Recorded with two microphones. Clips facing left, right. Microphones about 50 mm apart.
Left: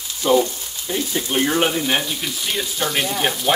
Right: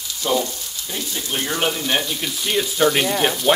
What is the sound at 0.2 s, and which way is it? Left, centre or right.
Speech, centre.